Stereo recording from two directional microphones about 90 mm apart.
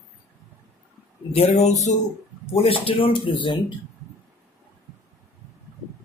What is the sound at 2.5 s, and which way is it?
Speech, 90° left.